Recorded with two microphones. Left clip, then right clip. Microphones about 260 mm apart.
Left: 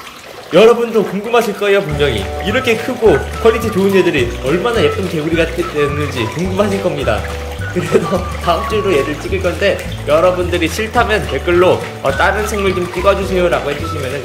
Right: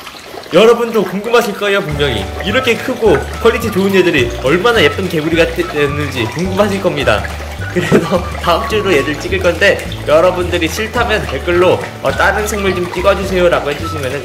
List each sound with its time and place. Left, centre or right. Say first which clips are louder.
0.5 s speech: even; centre
8.5 s speech: right 1 dB; centre